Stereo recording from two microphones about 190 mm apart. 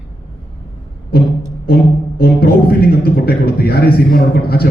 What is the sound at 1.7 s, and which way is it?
A man's voice, 55° left (ahead or behind).